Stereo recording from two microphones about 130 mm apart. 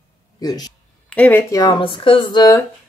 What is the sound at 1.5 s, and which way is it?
Speech, 30° left (ahead or behind).